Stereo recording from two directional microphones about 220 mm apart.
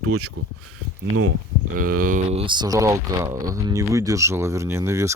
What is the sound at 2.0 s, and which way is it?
Speech, 30° right (ahead or behind).